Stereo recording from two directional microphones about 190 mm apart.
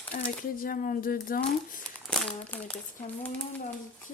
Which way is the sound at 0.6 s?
45° left (ahead or behind).